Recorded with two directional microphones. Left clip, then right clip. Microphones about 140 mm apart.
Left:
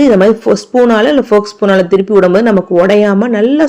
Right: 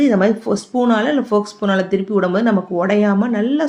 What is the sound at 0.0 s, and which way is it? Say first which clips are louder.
Speech: left 8 dB; 30° left (ahead or behind).